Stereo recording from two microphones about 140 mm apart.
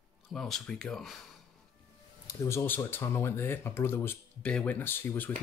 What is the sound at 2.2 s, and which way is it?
Speech, 20° left (ahead or behind).